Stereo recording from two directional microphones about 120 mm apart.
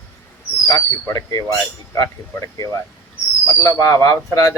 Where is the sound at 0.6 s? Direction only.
30° left (ahead or behind).